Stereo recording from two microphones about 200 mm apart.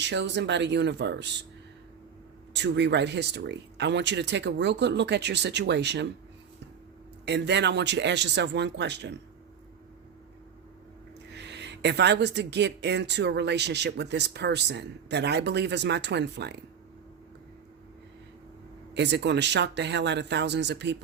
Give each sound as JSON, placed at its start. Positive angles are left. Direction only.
{"t": 0.0, "sound": "speech", "side_deg": -60}
{"t": 2.5, "sound": "speech", "side_deg": -60}
{"t": 7.3, "sound": "speech", "side_deg": -60}
{"t": 11.3, "sound": "speech", "side_deg": -60}
{"t": 18.9, "sound": "speech", "side_deg": -60}